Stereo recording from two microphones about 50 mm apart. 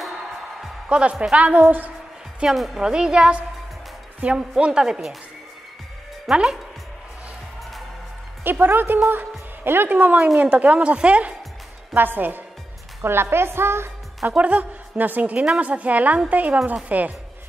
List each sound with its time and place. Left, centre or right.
0.8 s a woman's voice: right
2.4 s speech: centre
2.8 s a woman's voice: centre
4.2 s a woman's voice: right
4.6 s a woman's voice: centre
6.3 s a woman's voice: centre
8.5 s a woman's voice: right
11.9 s a woman's voice: right
13.0 s a woman's voice: right
14.3 s a woman's voice: right
15.3 s a woman's voice: centre
15.6 s a woman's voice: right